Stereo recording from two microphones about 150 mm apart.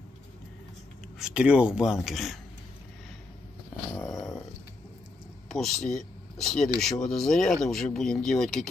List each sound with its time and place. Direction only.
1.2 s speech: 5° right (ahead or behind)
3.9 s dog: 20° left (ahead or behind)
5.5 s speech: centre (ahead or behind)